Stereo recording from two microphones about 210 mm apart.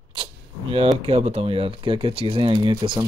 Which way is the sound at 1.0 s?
30° right (ahead or behind).